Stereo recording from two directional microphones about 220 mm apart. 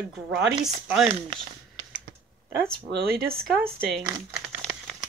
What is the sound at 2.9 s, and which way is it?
Speech, 45° right (ahead or behind).